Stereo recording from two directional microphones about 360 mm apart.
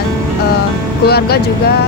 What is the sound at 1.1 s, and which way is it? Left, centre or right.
Speech, left.